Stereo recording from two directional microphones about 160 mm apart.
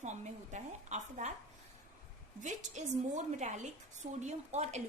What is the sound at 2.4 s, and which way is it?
A woman's voice, 50° right (ahead or behind).